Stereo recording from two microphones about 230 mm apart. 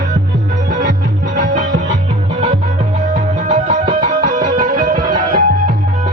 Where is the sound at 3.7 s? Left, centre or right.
Right.